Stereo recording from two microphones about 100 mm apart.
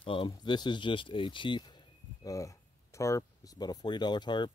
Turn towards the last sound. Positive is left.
turn(degrees=50)  # may be behind; listen again after turning